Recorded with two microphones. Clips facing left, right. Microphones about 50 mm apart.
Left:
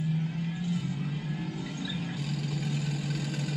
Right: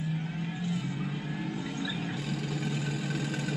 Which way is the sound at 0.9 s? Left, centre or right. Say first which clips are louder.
Even; right.